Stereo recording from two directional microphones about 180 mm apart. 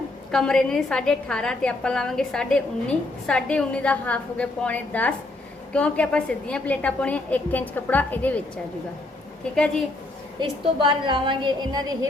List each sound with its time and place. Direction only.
0.3 s a woman's voice: 5° left (ahead or behind)
9.6 s a woman's voice: 5° left (ahead or behind)
10.4 s a woman's voice: 25° right (ahead or behind)